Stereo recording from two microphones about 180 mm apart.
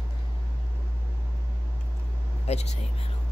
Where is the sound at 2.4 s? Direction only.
35° left (ahead or behind).